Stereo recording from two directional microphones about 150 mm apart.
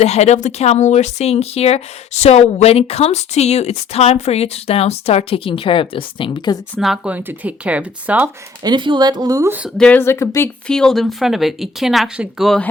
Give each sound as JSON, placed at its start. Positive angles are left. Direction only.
{"t": 0.0, "sound": "speech", "side_deg": 45}
{"t": 6.7, "sound": "speech", "side_deg": 0}
{"t": 8.6, "sound": "speech", "side_deg": -30}
{"t": 9.5, "sound": "speech", "side_deg": -10}
{"t": 9.7, "sound": "speech", "side_deg": 10}
{"t": 10.7, "sound": "speech", "side_deg": 5}